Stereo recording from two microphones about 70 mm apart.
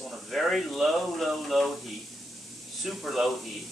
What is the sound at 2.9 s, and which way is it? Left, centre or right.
Speech, centre.